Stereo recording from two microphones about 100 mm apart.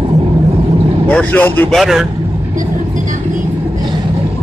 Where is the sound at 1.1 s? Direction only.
15° left (ahead or behind).